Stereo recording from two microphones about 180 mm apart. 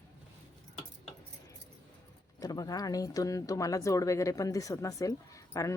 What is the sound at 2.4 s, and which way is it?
Speech, 20° left (ahead or behind).